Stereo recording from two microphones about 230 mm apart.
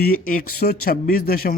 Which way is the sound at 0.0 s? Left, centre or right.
Left.